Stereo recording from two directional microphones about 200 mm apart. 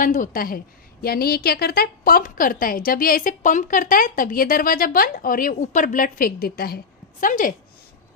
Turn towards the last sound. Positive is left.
turn(degrees=40)  # may be behind; listen again after turning